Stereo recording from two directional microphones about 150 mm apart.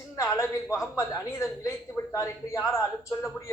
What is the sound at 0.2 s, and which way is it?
A man's voice, 20° left (ahead or behind).